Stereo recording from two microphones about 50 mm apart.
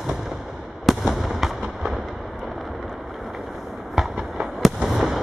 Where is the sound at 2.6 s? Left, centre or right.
Centre.